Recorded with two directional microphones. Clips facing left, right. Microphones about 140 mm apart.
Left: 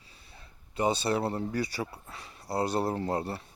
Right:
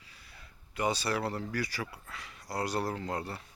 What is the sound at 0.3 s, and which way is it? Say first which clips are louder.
Speech: left 4 dB; 25° left (ahead or behind).